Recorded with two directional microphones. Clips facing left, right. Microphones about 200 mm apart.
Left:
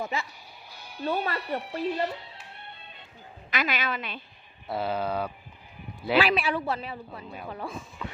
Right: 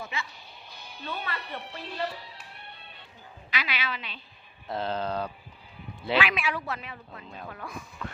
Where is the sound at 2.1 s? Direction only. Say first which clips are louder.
Left 1 dB; 25° left (ahead or behind).